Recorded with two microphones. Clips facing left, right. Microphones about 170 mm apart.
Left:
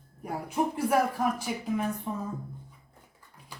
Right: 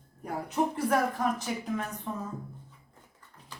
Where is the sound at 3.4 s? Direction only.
10° left (ahead or behind).